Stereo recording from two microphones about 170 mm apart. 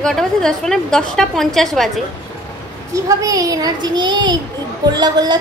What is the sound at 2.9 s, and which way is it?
A child's voice, 20° right (ahead or behind).